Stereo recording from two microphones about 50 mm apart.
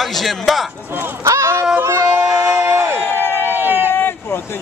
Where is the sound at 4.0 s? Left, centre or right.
Left.